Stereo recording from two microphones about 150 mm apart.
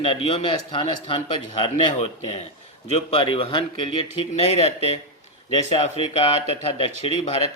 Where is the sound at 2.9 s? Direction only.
40° left (ahead or behind).